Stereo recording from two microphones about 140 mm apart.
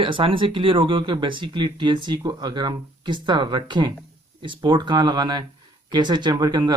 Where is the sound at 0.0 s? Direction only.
40° right (ahead or behind).